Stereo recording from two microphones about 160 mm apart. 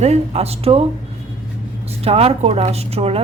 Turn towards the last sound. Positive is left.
turn(degrees=-40)  # may be behind; listen again after turning